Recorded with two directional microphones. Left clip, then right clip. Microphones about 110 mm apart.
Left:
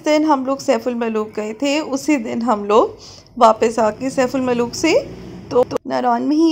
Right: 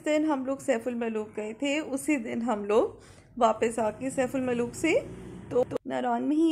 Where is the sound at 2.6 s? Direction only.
20° left (ahead or behind); by 4.6 s 40° left (ahead or behind).